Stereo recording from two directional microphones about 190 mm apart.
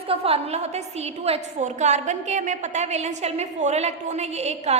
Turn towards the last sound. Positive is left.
turn(degrees=-35)  # may be behind; listen again after turning